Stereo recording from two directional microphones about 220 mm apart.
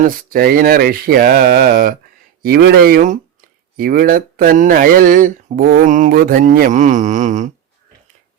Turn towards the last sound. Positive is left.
turn(degrees=-35)  # may be behind; listen again after turning